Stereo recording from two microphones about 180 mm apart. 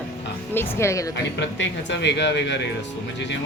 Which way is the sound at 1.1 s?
85° left.